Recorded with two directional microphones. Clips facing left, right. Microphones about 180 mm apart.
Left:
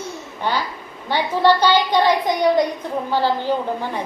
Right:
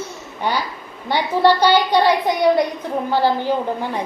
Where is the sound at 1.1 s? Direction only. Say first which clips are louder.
Right 1 dB; 15° right (ahead or behind).